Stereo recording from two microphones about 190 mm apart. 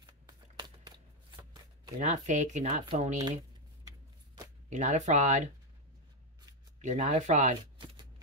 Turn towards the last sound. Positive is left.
turn(degrees=-40)  # may be behind; listen again after turning